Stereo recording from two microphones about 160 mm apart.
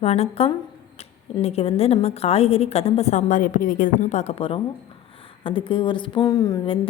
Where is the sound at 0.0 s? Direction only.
40° left (ahead or behind).